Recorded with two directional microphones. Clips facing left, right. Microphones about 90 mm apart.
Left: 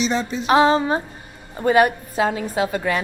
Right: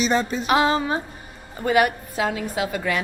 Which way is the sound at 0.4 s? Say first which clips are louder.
Left 7 dB; 30° left (ahead or behind).